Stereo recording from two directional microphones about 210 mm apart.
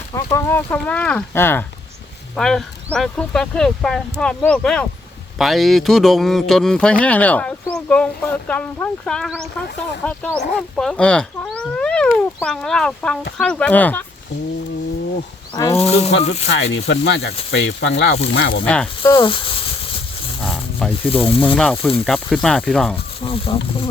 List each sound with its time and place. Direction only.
0.1 s speech: 15° left (ahead or behind)
15.5 s speech: 15° left (ahead or behind)
15.8 s speech: 30° left (ahead or behind)
16.5 s speech: 55° left (ahead or behind)
18.6 s speech: 5° left (ahead or behind); by 19.7 s 25° left (ahead or behind)
21.1 s speech: 25° left (ahead or behind)
21.4 s speech: 5° left (ahead or behind)
23.2 s speech: 25° left (ahead or behind)